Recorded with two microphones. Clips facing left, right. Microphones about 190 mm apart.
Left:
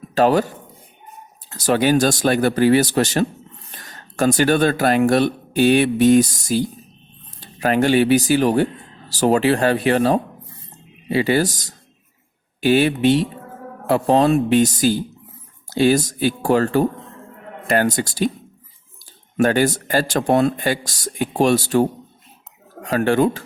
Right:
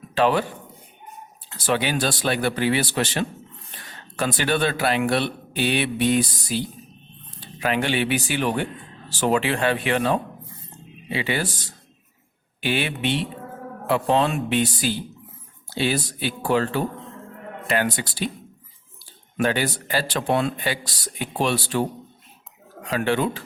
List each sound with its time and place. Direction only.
0.1 s a man's voice: 40° left (ahead or behind)
19.4 s speech: 45° left (ahead or behind)